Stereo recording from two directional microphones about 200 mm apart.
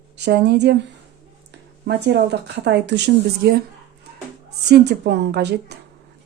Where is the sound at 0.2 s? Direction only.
55° right (ahead or behind).